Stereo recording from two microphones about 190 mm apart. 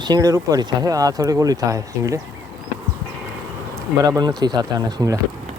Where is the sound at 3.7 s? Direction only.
20° right (ahead or behind).